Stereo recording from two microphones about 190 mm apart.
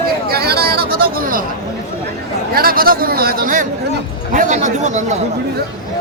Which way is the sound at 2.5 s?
50° right (ahead or behind).